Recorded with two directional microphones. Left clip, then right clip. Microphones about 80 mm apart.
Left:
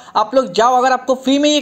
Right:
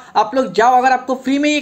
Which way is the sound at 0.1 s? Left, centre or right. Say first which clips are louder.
Left 1 dB; left.